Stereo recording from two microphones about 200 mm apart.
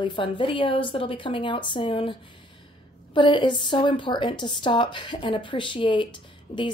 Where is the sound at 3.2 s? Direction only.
25° left (ahead or behind).